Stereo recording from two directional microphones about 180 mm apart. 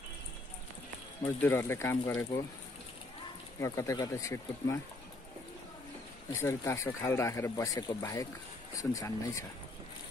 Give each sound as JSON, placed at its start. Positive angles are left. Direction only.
{"t": 1.2, "sound": "speech", "side_deg": 15}
{"t": 3.6, "sound": "speech", "side_deg": 20}
{"t": 6.4, "sound": "speech", "side_deg": 15}